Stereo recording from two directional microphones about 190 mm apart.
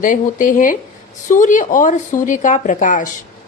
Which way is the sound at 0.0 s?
45° left (ahead or behind).